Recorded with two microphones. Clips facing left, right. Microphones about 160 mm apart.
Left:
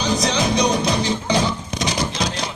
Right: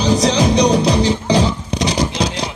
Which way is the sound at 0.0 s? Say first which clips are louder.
Right 6 dB; 35° right (ahead or behind).